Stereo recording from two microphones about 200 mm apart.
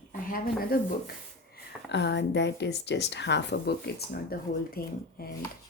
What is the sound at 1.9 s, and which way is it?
Speech, 60° left (ahead or behind).